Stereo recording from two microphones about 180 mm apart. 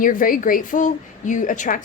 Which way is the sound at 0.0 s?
50° left (ahead or behind).